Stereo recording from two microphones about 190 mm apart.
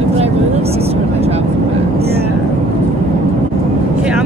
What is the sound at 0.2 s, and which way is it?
Vehicle, 30° right (ahead or behind).